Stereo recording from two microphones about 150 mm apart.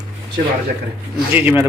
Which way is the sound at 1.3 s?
15° right (ahead or behind).